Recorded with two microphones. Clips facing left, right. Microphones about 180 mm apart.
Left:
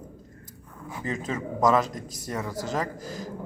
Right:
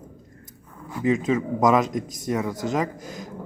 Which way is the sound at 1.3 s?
10° right (ahead or behind).